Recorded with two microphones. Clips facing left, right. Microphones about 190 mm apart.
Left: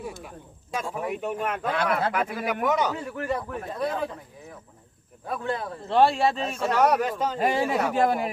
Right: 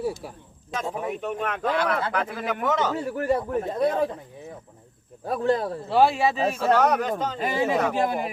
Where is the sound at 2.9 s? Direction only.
35° right (ahead or behind).